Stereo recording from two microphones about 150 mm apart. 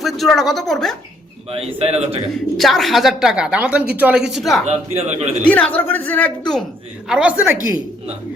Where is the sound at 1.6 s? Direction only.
45° right (ahead or behind).